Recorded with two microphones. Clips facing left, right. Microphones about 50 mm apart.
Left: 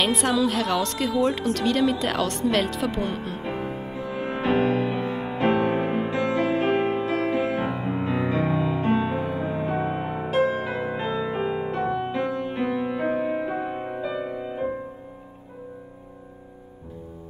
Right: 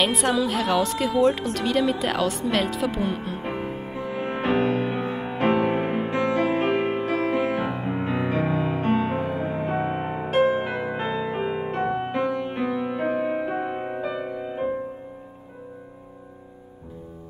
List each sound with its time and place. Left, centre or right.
0.0 s speech: centre
3.4 s music: right